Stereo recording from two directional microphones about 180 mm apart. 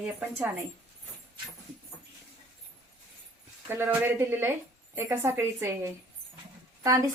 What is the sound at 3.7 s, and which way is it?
A woman's voice, 10° right (ahead or behind).